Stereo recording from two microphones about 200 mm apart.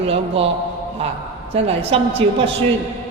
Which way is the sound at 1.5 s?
30° right (ahead or behind).